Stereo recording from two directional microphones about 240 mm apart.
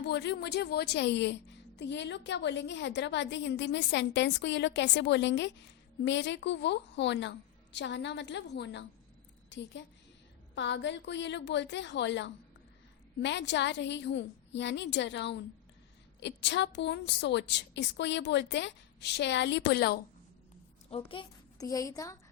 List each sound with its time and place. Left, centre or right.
0.0 s a woman's voice: left
20.9 s a woman's voice: left